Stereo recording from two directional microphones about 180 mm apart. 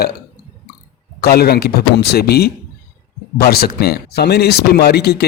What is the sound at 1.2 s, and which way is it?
Speech, 60° left (ahead or behind).